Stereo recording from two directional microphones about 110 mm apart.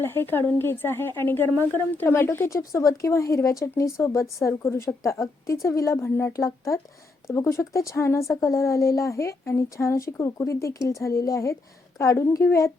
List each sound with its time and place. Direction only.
0.0 s speech: 20° left (ahead or behind)